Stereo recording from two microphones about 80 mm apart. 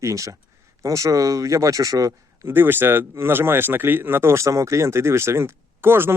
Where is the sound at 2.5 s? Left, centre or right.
Right.